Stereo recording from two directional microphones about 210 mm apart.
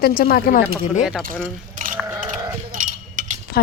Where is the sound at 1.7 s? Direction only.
40° right (ahead or behind).